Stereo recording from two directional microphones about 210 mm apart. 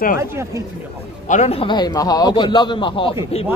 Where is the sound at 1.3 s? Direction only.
30° left (ahead or behind).